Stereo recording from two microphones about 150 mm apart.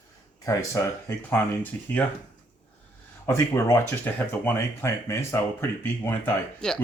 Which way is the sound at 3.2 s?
20° left (ahead or behind).